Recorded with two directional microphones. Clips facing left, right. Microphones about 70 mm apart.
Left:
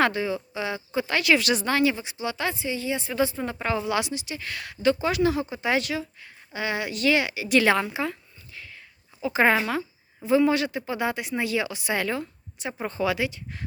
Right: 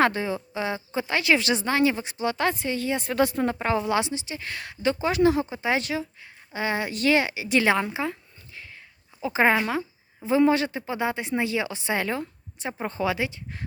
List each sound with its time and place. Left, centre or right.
0.0 s speech: right
2.0 s speech: right
3.4 s a woman's voice: right
9.6 s a sound: centre
10.2 s speech: right